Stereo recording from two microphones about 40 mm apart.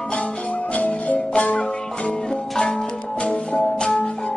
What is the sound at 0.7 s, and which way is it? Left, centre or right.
Music, left.